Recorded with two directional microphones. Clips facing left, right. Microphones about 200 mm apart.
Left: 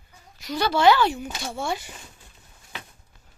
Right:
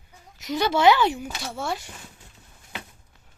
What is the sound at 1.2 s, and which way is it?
Speech, centre (ahead or behind).